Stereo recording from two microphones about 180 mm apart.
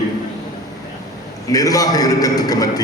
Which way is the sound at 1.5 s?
20° left (ahead or behind).